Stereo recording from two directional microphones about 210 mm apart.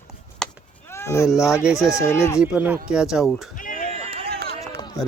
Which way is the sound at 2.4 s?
10° right (ahead or behind).